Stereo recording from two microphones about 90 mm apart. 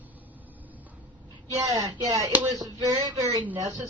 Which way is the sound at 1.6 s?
45° right (ahead or behind).